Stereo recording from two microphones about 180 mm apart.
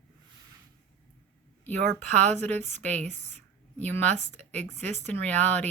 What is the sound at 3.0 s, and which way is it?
Speech, 40° right (ahead or behind).